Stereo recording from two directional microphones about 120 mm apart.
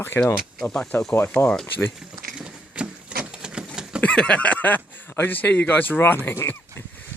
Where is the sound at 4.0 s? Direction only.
10° left (ahead or behind).